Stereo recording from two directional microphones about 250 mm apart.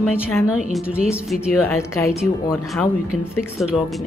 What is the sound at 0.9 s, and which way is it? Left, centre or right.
Speech, centre.